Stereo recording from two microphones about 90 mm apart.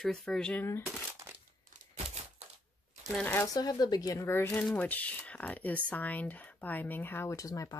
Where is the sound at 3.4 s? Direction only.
45° left (ahead or behind); by 4.4 s 30° left (ahead or behind).